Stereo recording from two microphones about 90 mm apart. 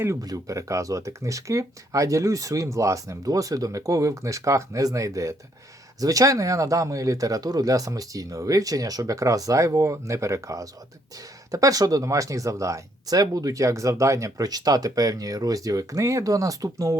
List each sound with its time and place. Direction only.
0.2 s speech: 40° right (ahead or behind)